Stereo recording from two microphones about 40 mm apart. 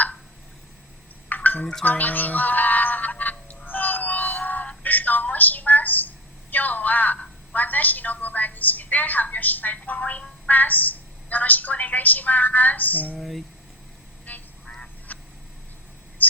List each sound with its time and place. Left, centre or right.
1.3 s a sound: left
1.8 s music: left
4.8 s telephone: left
7.5 s a woman's voice: left
10.0 s speech: left
10.5 s a woman's voice: left
13.1 s speech: centre
14.3 s quack: left
15.1 s duck: left
16.2 s speech: left